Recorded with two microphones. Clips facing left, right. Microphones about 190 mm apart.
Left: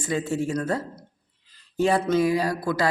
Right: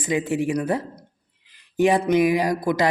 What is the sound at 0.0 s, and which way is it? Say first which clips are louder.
Speech: right 3 dB; 15° right (ahead or behind).